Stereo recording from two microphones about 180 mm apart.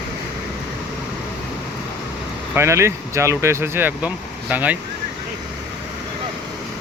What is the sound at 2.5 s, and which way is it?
Speech, 15° right (ahead or behind).